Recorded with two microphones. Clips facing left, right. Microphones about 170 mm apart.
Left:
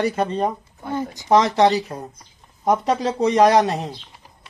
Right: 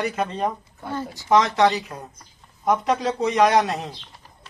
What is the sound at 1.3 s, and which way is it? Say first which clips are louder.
Speech: left 2 dB; 30° left (ahead or behind).